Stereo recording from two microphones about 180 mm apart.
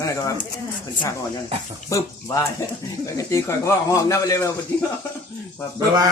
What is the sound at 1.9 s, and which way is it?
Speech, 15° left (ahead or behind).